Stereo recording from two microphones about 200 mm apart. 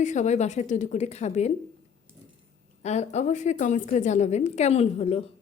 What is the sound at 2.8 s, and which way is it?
A woman's voice, 35° left (ahead or behind).